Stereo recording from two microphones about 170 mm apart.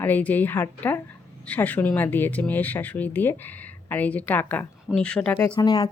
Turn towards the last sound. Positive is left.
turn(degrees=25)  # may be behind; listen again after turning